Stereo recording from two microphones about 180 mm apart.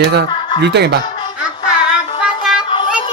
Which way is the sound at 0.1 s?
70° right (ahead or behind).